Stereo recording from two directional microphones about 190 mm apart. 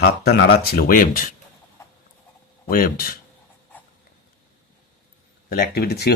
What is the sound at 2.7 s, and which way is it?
Speech, 50° left (ahead or behind).